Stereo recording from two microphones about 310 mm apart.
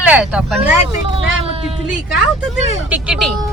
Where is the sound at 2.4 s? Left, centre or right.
Centre.